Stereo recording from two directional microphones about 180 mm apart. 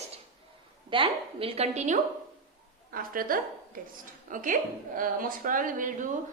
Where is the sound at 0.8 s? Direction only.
30° right (ahead or behind).